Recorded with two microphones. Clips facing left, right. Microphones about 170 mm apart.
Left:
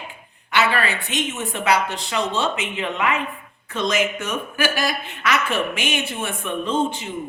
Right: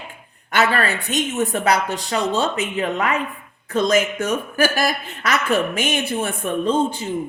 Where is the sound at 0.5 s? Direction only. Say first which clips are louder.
Right 2 dB; 40° right (ahead or behind).